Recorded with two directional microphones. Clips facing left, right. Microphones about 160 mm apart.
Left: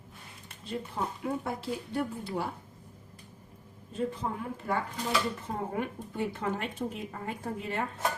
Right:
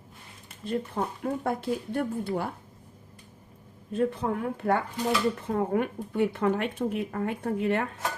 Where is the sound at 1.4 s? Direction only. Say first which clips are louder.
Right 6 dB; 55° right (ahead or behind).